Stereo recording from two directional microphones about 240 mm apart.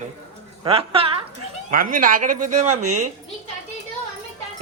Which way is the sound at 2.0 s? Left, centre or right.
Right.